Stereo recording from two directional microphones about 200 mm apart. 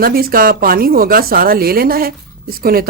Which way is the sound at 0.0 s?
45° right (ahead or behind).